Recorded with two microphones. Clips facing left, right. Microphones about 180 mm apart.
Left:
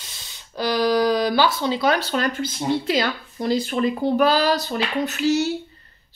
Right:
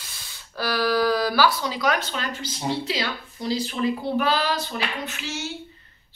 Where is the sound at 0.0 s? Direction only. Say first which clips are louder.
Left 1 dB; 20° left (ahead or behind).